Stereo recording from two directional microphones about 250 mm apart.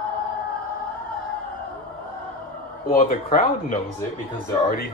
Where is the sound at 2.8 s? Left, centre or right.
Left.